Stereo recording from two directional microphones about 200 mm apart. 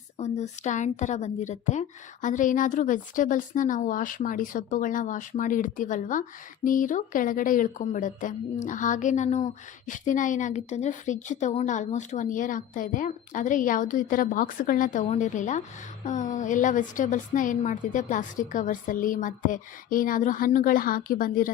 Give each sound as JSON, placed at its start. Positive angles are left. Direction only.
{"t": 0.2, "sound": "speech", "side_deg": 35}